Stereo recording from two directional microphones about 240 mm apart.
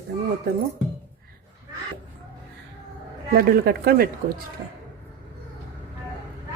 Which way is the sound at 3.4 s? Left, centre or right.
Right.